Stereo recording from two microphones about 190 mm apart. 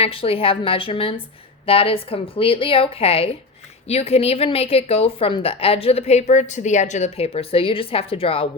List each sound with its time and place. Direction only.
0.0 s a woman's voice: 30° left (ahead or behind)